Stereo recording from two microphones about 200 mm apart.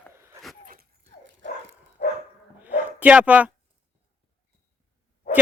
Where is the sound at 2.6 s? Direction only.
5° right (ahead or behind).